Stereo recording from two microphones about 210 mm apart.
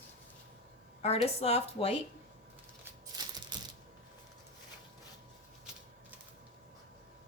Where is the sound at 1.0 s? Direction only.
30° left (ahead or behind).